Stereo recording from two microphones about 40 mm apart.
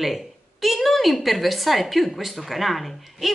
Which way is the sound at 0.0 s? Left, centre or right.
Centre.